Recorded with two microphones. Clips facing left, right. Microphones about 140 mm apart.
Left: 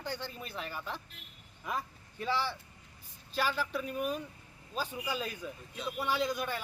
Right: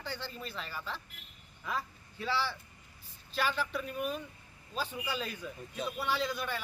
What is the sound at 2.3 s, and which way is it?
Speech, 15° left (ahead or behind).